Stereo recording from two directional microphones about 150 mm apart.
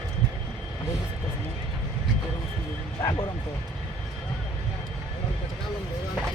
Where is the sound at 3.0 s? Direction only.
20° left (ahead or behind).